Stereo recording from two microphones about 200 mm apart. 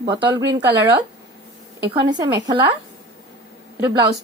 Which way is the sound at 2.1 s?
20° right (ahead or behind).